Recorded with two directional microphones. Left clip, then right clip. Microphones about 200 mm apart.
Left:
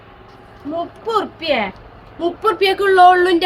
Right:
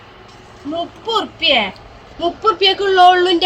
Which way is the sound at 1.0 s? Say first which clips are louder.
Right 3 dB; 10° left (ahead or behind).